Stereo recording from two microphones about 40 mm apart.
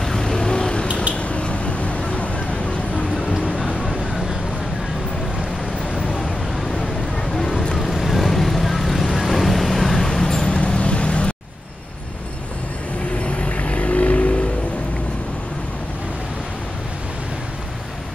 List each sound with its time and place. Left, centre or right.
0.0 s vehicle: centre
1.1 s a sound: left
3.4 s a sound: centre
3.8 s vehicle: centre
6.7 s vehicle: centre
7.7 s vehicle: centre
10.5 s vehicle: left
13.2 s vehicle: left